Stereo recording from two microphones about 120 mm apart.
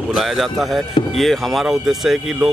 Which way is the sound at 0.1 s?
Centre (ahead or behind).